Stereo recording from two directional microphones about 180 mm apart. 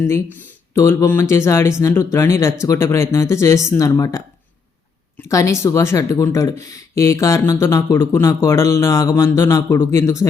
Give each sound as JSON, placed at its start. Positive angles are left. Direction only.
{"t": 0.7, "sound": "speech", "side_deg": 15}
{"t": 5.3, "sound": "speech", "side_deg": 20}